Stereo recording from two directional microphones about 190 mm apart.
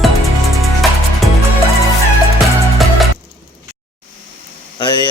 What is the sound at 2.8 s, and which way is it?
Music, centre (ahead or behind).